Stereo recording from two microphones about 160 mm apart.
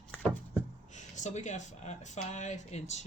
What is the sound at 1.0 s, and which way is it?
Speech, 50° left (ahead or behind).